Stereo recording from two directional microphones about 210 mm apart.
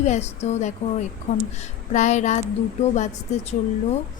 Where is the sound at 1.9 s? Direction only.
35° left (ahead or behind).